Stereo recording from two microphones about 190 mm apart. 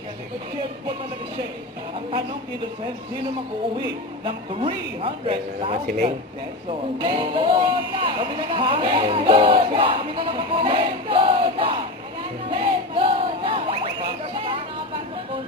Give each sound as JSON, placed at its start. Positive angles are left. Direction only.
{"t": 3.8, "sound": "a man's voice", "side_deg": -25}
{"t": 5.7, "sound": "a man's voice", "side_deg": -45}
{"t": 7.0, "sound": "speech", "side_deg": -25}
{"t": 12.5, "sound": "music", "side_deg": -25}
{"t": 14.3, "sound": "a sound", "side_deg": -30}